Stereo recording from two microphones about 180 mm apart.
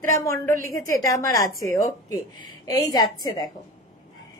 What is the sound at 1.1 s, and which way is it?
A woman's voice, 20° left (ahead or behind).